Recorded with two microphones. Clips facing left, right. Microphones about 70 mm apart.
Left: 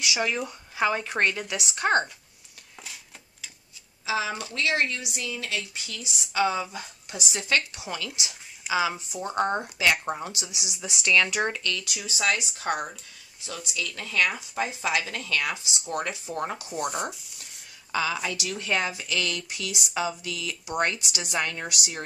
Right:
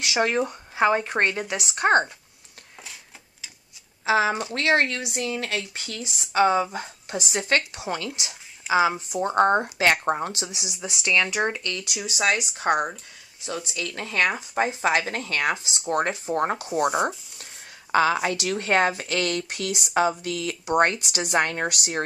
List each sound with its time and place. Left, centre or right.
0.0 s a woman's voice: right
0.5 s speech: right
2.8 s a sound: centre
4.0 s a woman's voice: right
9.3 s a woman's voice: right
11.4 s speech: centre
11.9 s a woman's voice: right
17.9 s speech: right